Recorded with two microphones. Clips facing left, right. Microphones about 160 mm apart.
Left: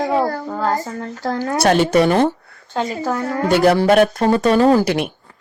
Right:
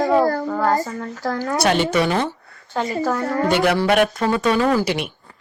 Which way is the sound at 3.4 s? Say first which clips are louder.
Left 5 dB; 40° left (ahead or behind).